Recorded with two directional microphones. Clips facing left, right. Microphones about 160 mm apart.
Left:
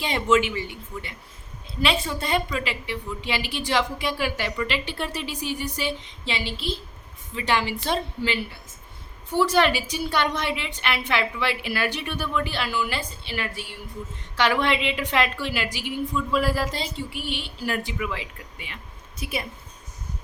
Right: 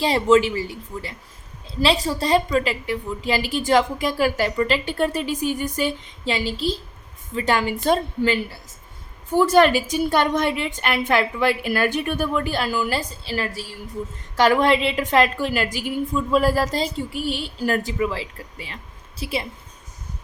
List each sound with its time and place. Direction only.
0.0 s a woman's voice: 35° right (ahead or behind)